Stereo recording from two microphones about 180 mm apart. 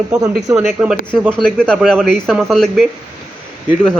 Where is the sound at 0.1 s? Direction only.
20° right (ahead or behind).